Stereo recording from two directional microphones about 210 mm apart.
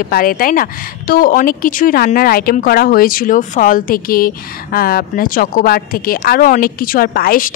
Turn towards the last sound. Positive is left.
turn(degrees=45)  # may be behind; listen again after turning